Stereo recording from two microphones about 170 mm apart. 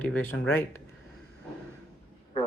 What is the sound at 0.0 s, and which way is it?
Speech, 10° left (ahead or behind).